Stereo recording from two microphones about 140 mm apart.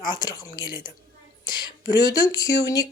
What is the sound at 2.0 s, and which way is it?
Speech, 25° left (ahead or behind).